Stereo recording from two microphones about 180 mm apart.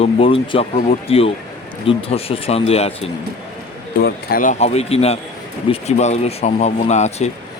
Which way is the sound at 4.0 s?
60° left (ahead or behind).